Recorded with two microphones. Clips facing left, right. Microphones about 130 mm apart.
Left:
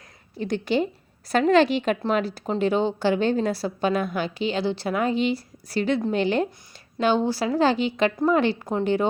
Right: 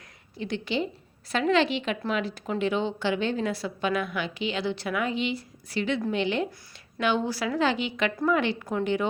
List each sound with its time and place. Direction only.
0.3 s a woman's voice: 40° left (ahead or behind)
7.0 s a woman's voice: 30° left (ahead or behind)